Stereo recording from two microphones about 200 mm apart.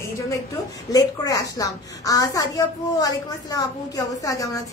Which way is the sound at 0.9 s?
15° left (ahead or behind).